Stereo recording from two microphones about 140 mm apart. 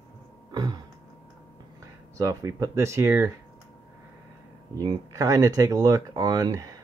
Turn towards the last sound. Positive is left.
turn(degrees=-25)  # may be behind; listen again after turning